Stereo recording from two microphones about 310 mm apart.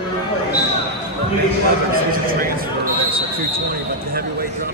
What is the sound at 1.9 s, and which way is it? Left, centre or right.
Speech, right.